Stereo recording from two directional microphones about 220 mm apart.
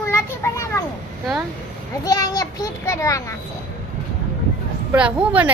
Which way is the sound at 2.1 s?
15° left (ahead or behind).